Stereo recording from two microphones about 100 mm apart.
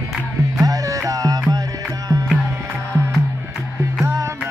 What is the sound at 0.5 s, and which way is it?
Music, 35° right (ahead or behind).